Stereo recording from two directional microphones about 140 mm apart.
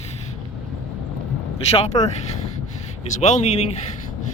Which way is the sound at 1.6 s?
50° left (ahead or behind).